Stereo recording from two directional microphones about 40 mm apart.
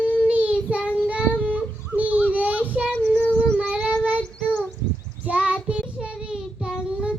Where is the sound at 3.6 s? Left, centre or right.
Right.